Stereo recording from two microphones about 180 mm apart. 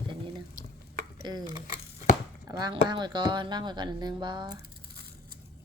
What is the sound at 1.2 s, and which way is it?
Speech, 25° right (ahead or behind).